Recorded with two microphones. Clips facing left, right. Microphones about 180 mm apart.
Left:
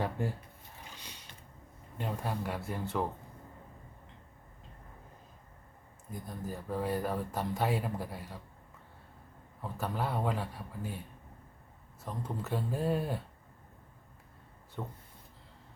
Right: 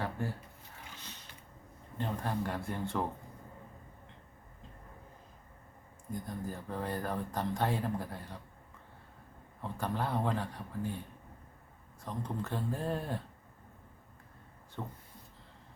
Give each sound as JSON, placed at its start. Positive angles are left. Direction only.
{"t": 0.0, "sound": "speech", "side_deg": 15}
{"t": 2.0, "sound": "speech", "side_deg": 10}
{"t": 6.1, "sound": "speech", "side_deg": 5}
{"t": 9.6, "sound": "speech", "side_deg": 5}
{"t": 12.0, "sound": "speech", "side_deg": 5}
{"t": 14.8, "sound": "speech", "side_deg": 5}